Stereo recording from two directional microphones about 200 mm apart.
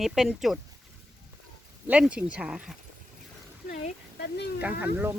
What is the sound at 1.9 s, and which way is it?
Speech, 5° right (ahead or behind).